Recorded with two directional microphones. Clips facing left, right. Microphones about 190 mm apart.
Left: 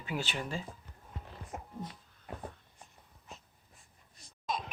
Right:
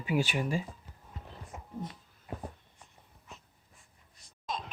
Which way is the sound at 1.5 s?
60° left (ahead or behind).